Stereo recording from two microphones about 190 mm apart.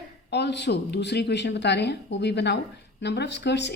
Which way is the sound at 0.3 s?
65° left (ahead or behind).